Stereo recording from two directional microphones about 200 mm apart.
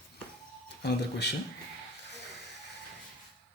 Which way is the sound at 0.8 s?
55° left (ahead or behind).